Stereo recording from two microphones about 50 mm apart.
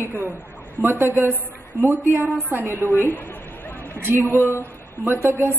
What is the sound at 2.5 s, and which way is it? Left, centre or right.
Speech, right.